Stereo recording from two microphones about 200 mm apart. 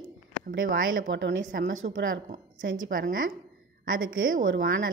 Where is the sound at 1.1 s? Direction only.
65° right (ahead or behind).